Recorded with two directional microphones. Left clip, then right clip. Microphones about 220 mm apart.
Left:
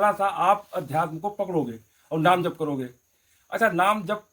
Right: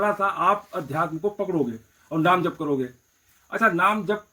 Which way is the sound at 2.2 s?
20° left (ahead or behind).